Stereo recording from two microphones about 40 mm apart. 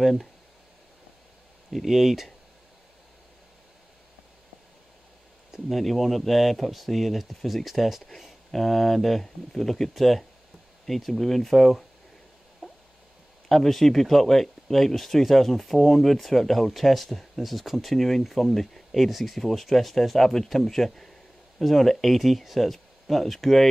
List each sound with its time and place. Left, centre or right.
0.0 s speech: centre
1.7 s speech: centre
5.7 s speech: centre
12.6 s a sound: centre
13.5 s speech: centre